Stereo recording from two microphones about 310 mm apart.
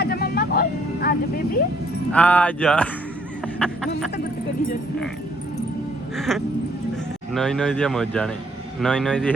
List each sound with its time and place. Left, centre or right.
0.0 s vehicle: left
2.1 s speech: centre
6.1 s speech: centre